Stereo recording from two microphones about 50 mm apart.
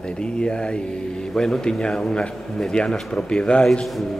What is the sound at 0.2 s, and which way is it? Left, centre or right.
A man's voice, centre.